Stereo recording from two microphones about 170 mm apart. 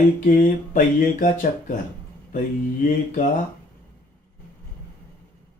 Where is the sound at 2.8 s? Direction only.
50° left (ahead or behind).